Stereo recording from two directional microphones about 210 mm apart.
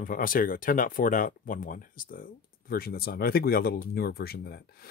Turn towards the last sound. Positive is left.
turn(degrees=50)  # may be behind; listen again after turning